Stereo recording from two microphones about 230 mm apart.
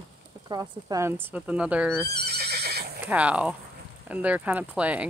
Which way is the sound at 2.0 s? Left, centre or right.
Right.